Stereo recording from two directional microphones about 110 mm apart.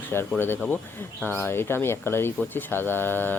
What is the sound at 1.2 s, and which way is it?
Speech, 20° left (ahead or behind).